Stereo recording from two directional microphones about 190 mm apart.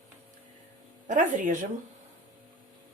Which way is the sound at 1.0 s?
40° right (ahead or behind).